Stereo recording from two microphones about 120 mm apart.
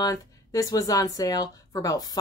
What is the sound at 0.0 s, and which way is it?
Speech, 30° left (ahead or behind).